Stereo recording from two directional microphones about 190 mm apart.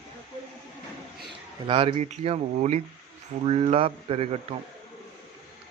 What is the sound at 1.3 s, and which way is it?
Speech, 30° right (ahead or behind).